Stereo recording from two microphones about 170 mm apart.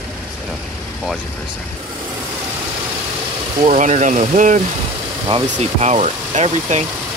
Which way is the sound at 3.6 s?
45° right (ahead or behind).